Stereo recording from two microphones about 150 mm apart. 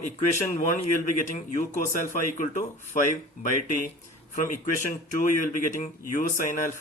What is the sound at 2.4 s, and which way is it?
Speech, 65° left (ahead or behind).